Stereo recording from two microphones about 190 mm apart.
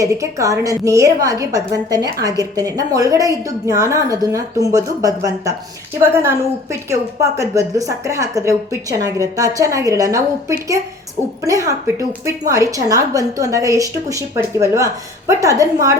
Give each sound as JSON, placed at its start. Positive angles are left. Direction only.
{"t": 0.0, "sound": "a woman's voice", "side_deg": -15}
{"t": 11.4, "sound": "a woman's voice", "side_deg": -15}